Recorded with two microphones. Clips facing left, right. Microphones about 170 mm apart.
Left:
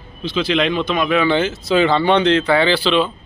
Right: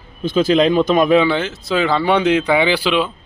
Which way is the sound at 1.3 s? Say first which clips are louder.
Left 2 dB; centre (ahead or behind).